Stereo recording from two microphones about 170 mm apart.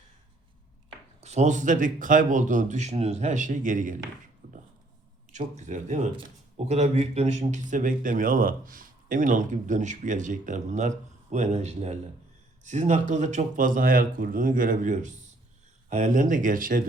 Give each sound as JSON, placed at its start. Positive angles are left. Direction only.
{"t": 1.2, "sound": "a man's voice", "side_deg": -40}
{"t": 5.3, "sound": "a man's voice", "side_deg": -45}